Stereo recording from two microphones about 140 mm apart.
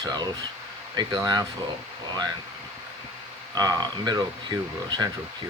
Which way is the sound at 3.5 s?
30° right (ahead or behind).